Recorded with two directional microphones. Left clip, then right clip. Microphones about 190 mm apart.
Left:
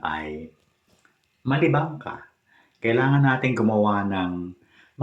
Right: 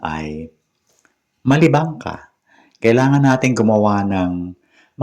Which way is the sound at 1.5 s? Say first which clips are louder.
Right 7 dB; 50° right (ahead or behind).